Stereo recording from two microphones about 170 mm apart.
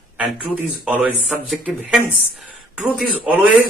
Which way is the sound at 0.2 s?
10° right (ahead or behind).